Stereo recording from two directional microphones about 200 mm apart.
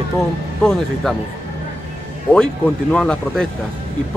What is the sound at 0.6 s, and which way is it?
Speech, 5° left (ahead or behind).